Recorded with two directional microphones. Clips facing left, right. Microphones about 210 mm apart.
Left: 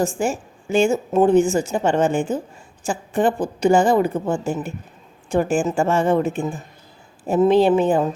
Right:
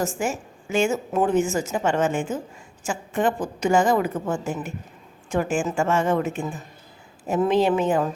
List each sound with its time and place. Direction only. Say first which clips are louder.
0.0 s a woman's voice: left 4 dB; 30° left (ahead or behind)